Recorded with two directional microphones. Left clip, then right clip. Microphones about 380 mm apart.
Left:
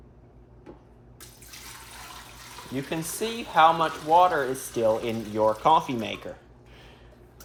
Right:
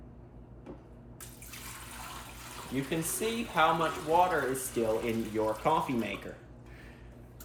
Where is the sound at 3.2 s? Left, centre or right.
Centre.